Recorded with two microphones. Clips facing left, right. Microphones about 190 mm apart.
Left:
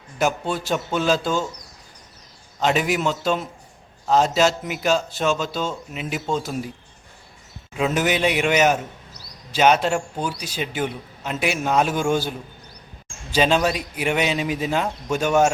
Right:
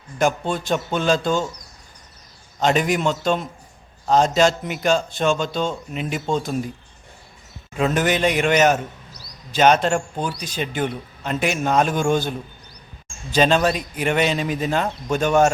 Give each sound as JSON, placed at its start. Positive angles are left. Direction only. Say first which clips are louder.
{"t": 0.2, "sound": "a man's voice", "louder": "right 2 dB", "side_deg": 5}
{"t": 2.6, "sound": "a man's voice", "louder": "right 2 dB", "side_deg": 5}
{"t": 7.7, "sound": "speech", "louder": "right 1 dB", "side_deg": 5}
{"t": 13.3, "sound": "speech", "louder": "right 2 dB", "side_deg": 10}